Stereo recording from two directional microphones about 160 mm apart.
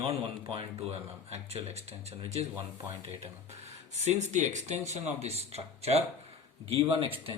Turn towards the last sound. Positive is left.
turn(degrees=-35)  # may be behind; listen again after turning